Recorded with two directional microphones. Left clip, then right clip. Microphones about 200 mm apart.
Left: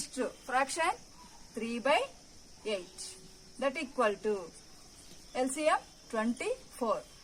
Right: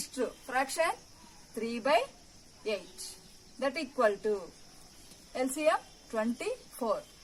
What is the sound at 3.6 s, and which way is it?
A woman's voice, 20° left (ahead or behind).